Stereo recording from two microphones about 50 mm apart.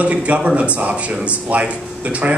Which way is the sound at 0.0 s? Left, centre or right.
Right.